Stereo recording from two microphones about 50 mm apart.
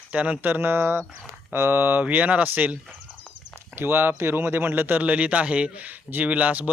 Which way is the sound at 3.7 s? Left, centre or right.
Right.